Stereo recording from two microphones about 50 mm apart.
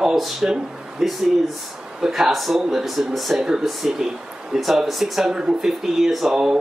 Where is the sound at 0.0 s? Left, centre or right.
Centre.